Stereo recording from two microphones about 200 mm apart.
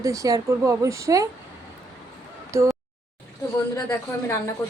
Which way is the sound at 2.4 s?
15° right (ahead or behind).